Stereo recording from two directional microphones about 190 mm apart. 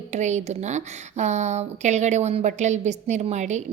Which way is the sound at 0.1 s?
35° right (ahead or behind).